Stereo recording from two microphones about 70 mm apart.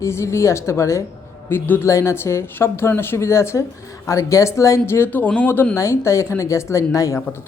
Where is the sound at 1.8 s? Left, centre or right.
Left.